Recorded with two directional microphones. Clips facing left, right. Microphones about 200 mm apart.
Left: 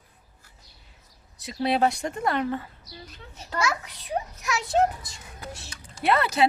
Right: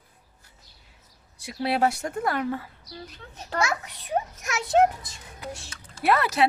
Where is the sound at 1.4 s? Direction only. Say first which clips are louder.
Left 1 dB; 10° right (ahead or behind).